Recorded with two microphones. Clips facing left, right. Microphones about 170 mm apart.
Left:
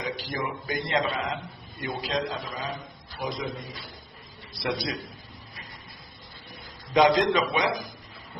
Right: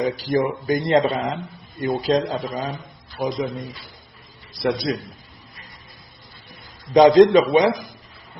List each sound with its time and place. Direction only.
0.0 s a man's voice: 40° right (ahead or behind)
4.6 s speech: 40° right (ahead or behind)
6.9 s speech: 35° right (ahead or behind)